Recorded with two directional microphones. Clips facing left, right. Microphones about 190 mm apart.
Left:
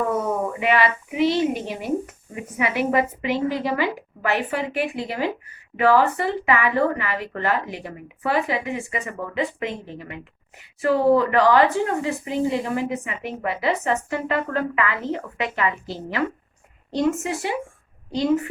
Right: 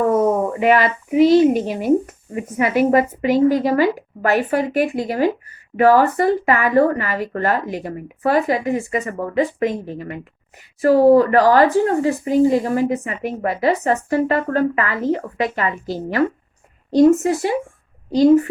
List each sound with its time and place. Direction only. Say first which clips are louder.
0.6 s speech: right 5 dB; 45° right (ahead or behind)